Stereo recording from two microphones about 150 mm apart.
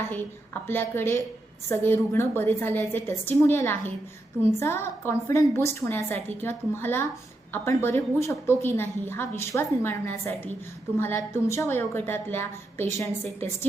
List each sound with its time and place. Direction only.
0.7 s a woman's voice: 15° left (ahead or behind)